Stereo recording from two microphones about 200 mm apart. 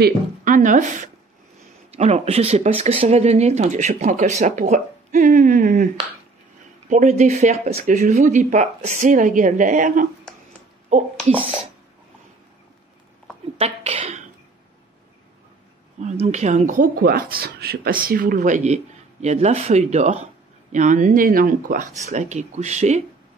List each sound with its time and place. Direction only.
0.0 s a woman's voice: 40° right (ahead or behind)
6.9 s speech: 35° right (ahead or behind)
13.6 s speech: 30° right (ahead or behind)
16.0 s speech: 35° right (ahead or behind)